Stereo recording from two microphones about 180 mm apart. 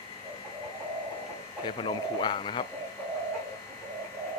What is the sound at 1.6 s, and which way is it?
Speech, 25° left (ahead or behind).